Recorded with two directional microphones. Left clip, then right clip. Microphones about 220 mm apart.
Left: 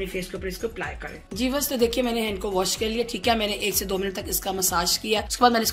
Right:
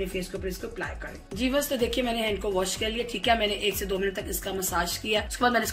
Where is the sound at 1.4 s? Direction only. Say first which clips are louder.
Left 2 dB; 45° left (ahead or behind).